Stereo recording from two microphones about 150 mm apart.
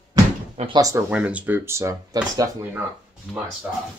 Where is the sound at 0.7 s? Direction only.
25° right (ahead or behind).